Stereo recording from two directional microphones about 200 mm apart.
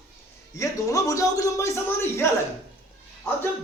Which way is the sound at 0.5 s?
15° left (ahead or behind).